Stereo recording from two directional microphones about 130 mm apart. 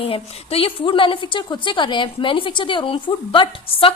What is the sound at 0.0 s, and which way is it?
A woman's voice, 45° left (ahead or behind).